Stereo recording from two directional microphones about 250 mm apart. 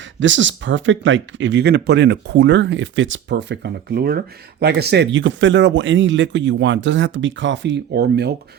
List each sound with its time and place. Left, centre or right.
0.2 s speech: right